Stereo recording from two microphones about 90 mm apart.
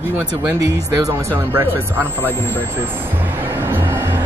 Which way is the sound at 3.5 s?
25° right (ahead or behind).